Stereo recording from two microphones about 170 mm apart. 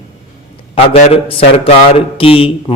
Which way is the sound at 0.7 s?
35° left (ahead or behind).